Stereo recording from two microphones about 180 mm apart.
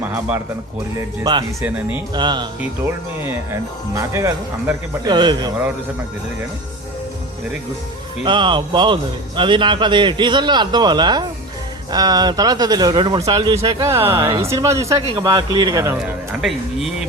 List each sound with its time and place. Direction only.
0.0 s speech: 10° right (ahead or behind)
1.2 s speech: 25° right (ahead or behind)
2.8 s speech: 15° right (ahead or behind)
8.2 s speech: 25° right (ahead or behind)